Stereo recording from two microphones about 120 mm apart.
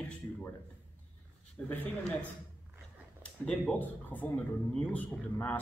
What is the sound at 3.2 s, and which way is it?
Speech, 10° left (ahead or behind).